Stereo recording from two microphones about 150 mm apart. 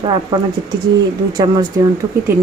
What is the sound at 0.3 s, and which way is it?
Speech, 30° right (ahead or behind).